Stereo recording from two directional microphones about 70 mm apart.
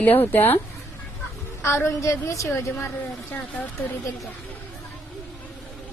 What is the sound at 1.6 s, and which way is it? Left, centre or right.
Speech, left.